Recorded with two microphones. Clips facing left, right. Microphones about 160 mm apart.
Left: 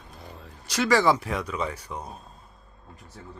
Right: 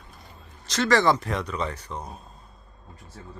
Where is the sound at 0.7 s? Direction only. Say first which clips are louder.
Even; 10° left (ahead or behind).